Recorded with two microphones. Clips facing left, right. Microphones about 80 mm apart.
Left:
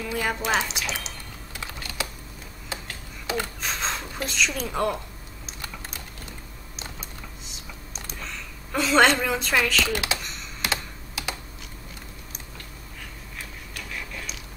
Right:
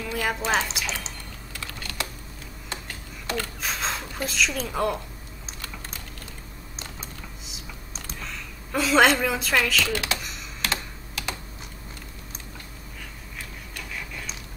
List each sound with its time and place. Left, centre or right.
0.0 s speech: centre
1.5 s typing: centre
1.8 s typing: centre
2.7 s a sound: centre
3.6 s speech: centre
8.2 s a woman's voice: centre
9.8 s speech: centre
10.1 s computer keyboard: centre